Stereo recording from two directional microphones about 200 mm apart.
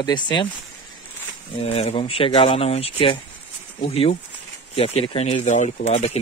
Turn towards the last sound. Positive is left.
turn(degrees=30)  # may be behind; listen again after turning